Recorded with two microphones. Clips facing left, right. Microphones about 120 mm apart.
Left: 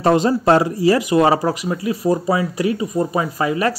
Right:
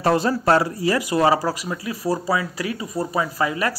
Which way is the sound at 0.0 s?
20° left (ahead or behind).